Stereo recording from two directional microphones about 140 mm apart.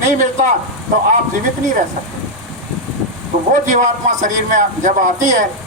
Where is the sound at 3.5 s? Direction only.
65° right (ahead or behind).